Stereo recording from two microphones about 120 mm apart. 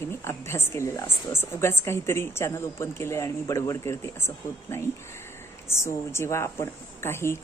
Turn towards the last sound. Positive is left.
turn(degrees=20)  # may be behind; listen again after turning